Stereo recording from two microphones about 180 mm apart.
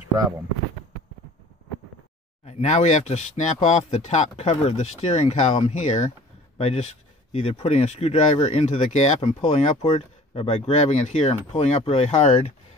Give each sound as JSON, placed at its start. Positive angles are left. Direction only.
{"t": 2.4, "sound": "speech", "side_deg": 40}